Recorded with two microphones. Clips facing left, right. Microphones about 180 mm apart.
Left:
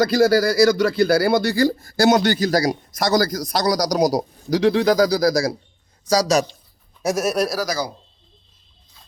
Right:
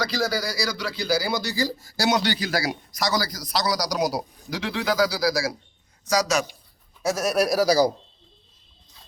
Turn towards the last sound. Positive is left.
turn(degrees=-25)  # may be behind; listen again after turning